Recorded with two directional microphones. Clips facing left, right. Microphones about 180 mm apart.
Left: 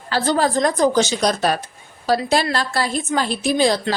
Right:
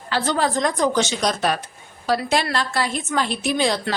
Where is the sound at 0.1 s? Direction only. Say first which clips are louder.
Left 3 dB; 40° left (ahead or behind).